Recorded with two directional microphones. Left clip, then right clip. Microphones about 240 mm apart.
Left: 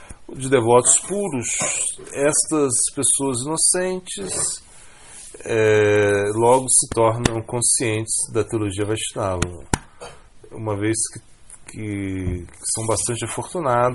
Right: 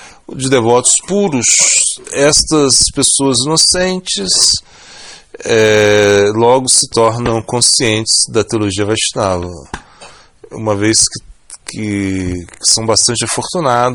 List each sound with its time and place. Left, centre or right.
0.3 s speech: right
5.4 s speech: right
10.5 s speech: right